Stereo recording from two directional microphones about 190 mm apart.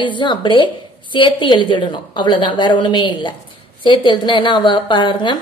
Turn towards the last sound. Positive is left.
turn(degrees=25)  # may be behind; listen again after turning